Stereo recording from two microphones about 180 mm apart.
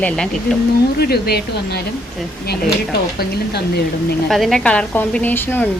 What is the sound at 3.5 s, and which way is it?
Speech, 60° left (ahead or behind).